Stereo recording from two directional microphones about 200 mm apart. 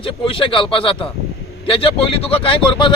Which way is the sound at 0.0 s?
25° left (ahead or behind).